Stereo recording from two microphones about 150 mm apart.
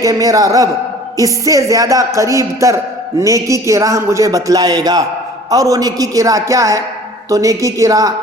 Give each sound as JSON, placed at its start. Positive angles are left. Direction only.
{"t": 0.0, "sound": "a man's voice", "side_deg": -20}